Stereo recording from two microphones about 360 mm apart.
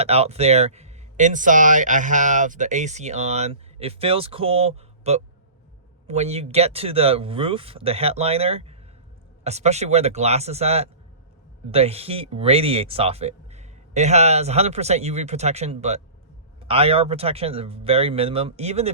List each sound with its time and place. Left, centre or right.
0.0 s speech: centre